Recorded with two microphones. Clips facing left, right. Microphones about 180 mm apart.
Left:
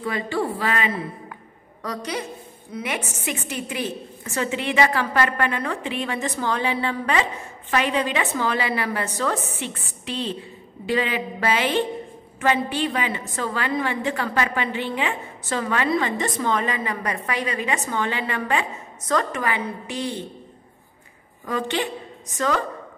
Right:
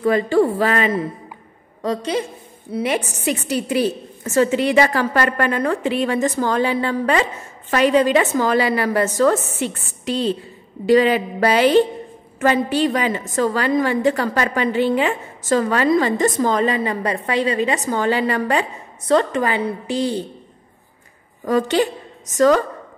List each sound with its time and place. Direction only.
0.0 s speech: 45° right (ahead or behind)
1.8 s a woman's voice: 30° right (ahead or behind)
21.5 s a woman's voice: 40° right (ahead or behind)